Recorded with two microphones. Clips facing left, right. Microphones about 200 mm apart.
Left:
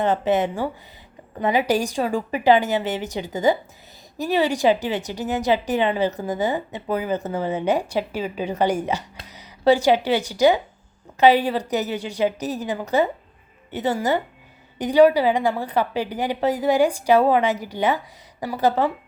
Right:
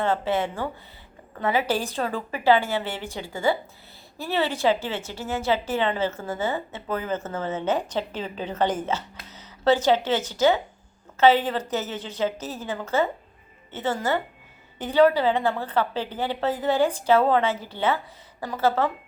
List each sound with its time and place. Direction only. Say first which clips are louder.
0.0 s a woman's voice: left 4 dB; 20° left (ahead or behind)